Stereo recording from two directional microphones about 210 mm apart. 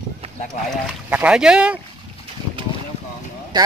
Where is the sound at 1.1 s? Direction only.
5° right (ahead or behind).